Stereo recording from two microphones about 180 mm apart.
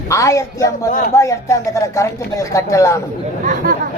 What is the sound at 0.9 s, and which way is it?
Speech, 45° left (ahead or behind).